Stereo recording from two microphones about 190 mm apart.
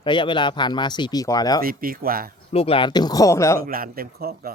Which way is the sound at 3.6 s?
50° right (ahead or behind).